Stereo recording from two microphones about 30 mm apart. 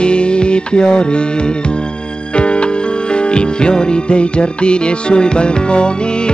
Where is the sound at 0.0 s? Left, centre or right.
Left.